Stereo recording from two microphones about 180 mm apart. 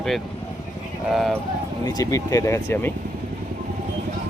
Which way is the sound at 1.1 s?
Centre (ahead or behind).